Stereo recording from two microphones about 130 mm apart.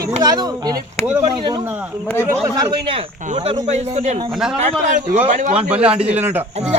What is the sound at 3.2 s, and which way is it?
Speech, 80° right.